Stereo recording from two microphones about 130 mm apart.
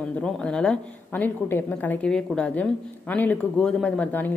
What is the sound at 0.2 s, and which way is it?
A woman's voice, 5° left (ahead or behind).